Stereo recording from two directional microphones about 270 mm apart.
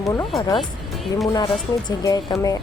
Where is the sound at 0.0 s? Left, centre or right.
Centre.